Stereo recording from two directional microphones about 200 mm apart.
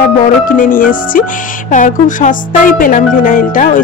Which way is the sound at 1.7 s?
40° left (ahead or behind).